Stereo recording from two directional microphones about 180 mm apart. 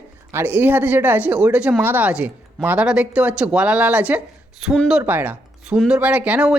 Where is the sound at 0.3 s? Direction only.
10° right (ahead or behind).